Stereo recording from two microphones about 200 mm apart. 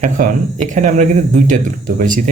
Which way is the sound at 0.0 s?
40° right (ahead or behind).